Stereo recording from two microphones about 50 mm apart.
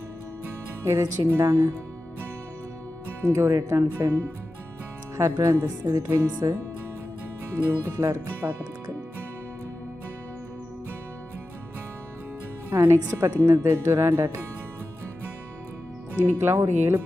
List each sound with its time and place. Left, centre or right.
0.8 s speech: right
3.2 s speech: right
5.1 s speech: right
7.5 s speech: right
12.7 s speech: right
13.4 s speech: right
16.4 s speech: right